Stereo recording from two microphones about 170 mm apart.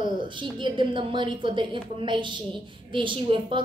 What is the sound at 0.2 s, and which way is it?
A woman's voice, 30° right (ahead or behind).